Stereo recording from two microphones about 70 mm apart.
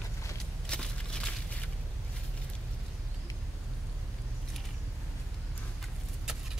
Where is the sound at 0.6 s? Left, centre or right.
Centre.